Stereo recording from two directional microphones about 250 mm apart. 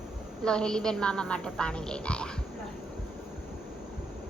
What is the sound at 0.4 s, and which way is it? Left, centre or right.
A woman's voice, centre.